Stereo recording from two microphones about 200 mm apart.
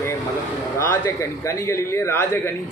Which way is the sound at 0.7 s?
10° left (ahead or behind).